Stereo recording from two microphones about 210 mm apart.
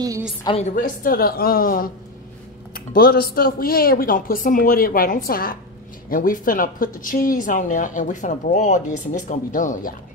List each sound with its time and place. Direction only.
0.4 s speech: 25° left (ahead or behind)